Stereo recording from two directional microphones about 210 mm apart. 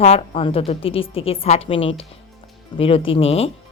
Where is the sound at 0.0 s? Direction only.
30° left (ahead or behind).